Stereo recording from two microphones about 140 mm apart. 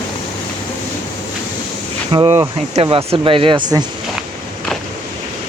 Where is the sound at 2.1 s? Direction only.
35° right (ahead or behind).